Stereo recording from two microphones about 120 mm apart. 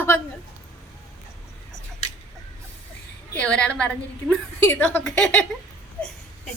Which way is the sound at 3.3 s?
10° left (ahead or behind).